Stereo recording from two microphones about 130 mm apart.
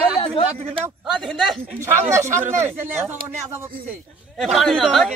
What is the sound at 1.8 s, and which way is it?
Speech, 65° right (ahead or behind).